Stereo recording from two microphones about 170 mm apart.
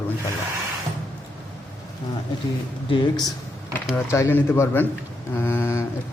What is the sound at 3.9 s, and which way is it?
A man's voice, 15° left (ahead or behind).